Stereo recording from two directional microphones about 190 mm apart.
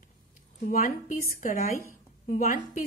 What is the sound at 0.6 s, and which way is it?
A woman's voice, 45° left (ahead or behind).